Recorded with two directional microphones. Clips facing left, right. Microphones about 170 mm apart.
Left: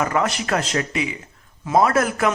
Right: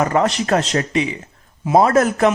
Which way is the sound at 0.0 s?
35° right (ahead or behind).